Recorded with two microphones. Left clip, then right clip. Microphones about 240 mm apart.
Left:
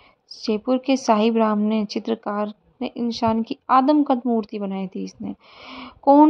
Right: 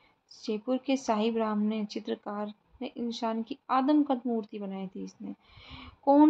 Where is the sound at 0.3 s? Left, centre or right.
Left.